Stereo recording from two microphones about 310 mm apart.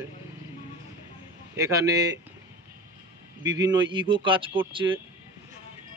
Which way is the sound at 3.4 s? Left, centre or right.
Centre.